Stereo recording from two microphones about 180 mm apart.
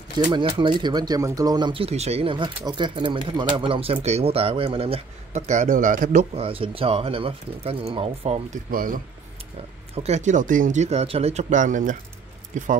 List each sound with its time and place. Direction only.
0.3 s speech: 25° right (ahead or behind)
8.6 s speech: 50° right (ahead or behind)
9.9 s speech: 35° right (ahead or behind)